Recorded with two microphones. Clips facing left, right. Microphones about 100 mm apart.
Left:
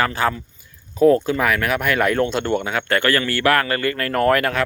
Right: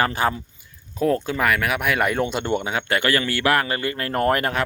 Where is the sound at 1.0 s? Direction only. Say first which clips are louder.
Left 6 dB; centre (ahead or behind); by 4.6 s 25° right (ahead or behind).